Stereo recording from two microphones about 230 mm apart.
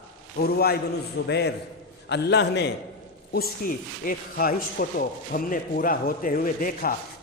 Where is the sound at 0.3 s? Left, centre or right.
Left.